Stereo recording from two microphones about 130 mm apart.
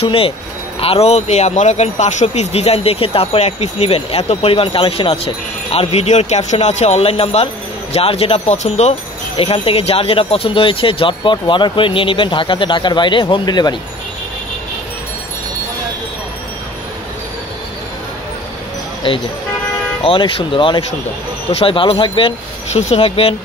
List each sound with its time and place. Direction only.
0.0 s speech: 45° left (ahead or behind)
20.0 s speech: 40° left (ahead or behind)
22.7 s speech: 60° left (ahead or behind)